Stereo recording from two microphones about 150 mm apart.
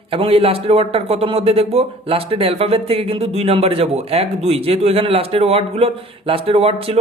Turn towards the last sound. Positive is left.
turn(degrees=-40)  # may be behind; listen again after turning